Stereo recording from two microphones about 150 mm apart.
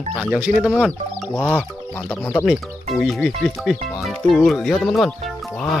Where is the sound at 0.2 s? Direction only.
5° right (ahead or behind).